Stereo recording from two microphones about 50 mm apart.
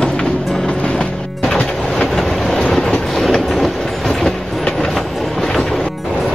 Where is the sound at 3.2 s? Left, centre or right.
Centre.